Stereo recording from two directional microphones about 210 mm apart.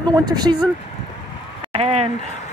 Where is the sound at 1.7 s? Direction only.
30° right (ahead or behind).